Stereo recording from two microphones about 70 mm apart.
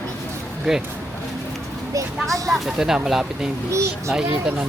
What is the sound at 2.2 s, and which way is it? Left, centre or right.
Speech, right.